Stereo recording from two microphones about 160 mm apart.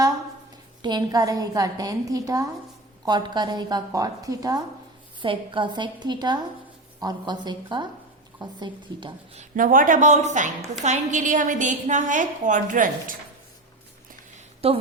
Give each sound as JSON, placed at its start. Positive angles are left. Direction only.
{"t": 0.8, "sound": "a woman's voice", "side_deg": -25}
{"t": 9.4, "sound": "a woman's voice", "side_deg": -55}
{"t": 14.6, "sound": "a woman's voice", "side_deg": -35}